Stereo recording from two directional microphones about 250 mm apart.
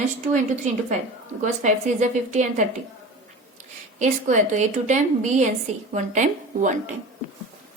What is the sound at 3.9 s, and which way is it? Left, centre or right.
A woman's voice, right.